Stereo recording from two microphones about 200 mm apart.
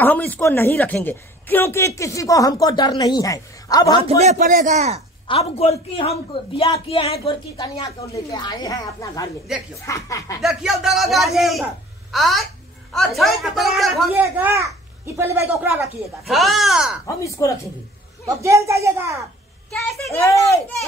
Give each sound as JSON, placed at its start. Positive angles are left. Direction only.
{"t": 0.0, "sound": "a woman's voice", "side_deg": 10}
{"t": 4.2, "sound": "a man's voice", "side_deg": -40}
{"t": 5.3, "sound": "a man's voice", "side_deg": 30}
{"t": 9.5, "sound": "speech", "side_deg": -5}
{"t": 9.8, "sound": "a woman's voice", "side_deg": 15}
{"t": 10.4, "sound": "a woman's voice", "side_deg": 0}
{"t": 15.8, "sound": "speech", "side_deg": 0}
{"t": 17.0, "sound": "a woman's voice", "side_deg": 15}
{"t": 18.2, "sound": "a woman's voice", "side_deg": -15}
{"t": 19.7, "sound": "speech", "side_deg": 0}
{"t": 20.2, "sound": "a woman's voice", "side_deg": 15}